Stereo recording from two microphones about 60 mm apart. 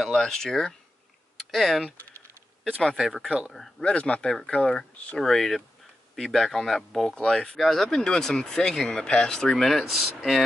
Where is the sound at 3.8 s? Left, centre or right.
Left.